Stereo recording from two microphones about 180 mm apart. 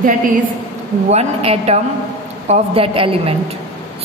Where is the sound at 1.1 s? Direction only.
35° right (ahead or behind).